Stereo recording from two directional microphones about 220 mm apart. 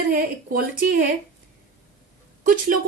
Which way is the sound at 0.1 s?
40° right (ahead or behind).